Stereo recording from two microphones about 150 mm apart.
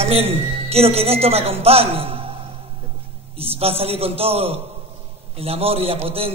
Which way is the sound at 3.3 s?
40° right (ahead or behind).